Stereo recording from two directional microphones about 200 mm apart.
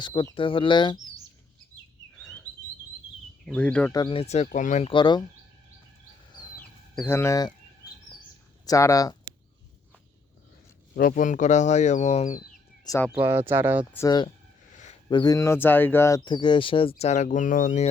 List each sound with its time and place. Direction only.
0.0 s speech: 20° left (ahead or behind)
2.1 s chirp: 5° left (ahead or behind)
3.4 s speech: 5° left (ahead or behind)
3.9 s speech: 25° left (ahead or behind)
4.9 s speech: 25° left (ahead or behind)
6.6 s chicken: 10° left (ahead or behind)
8.6 s speech: 15° left (ahead or behind)
10.9 s speech: 45° left (ahead or behind)
12.8 s bird: 15° left (ahead or behind)
13.1 s speech: 10° right (ahead or behind)
13.9 s speech: 15° left (ahead or behind)
14.7 s a sound: 35° left (ahead or behind)
15.1 s speech: 20° left (ahead or behind); by 17.8 s 40° left (ahead or behind)